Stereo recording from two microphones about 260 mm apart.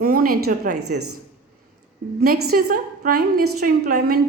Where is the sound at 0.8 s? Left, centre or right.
Right.